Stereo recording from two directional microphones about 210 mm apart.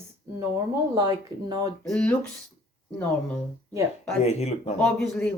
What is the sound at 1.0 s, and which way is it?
Speech, 15° right (ahead or behind).